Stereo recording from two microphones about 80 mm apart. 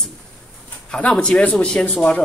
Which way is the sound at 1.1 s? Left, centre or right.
Centre.